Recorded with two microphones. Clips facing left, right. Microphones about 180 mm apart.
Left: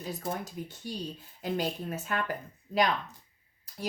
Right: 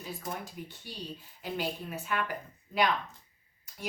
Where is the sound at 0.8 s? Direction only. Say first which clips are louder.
Left 5 dB; 45° left (ahead or behind).